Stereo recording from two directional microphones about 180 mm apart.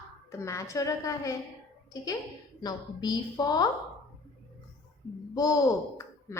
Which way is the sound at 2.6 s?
20° left (ahead or behind).